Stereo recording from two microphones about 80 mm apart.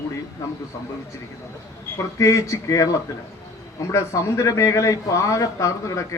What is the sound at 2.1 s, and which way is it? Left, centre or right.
Speech, left.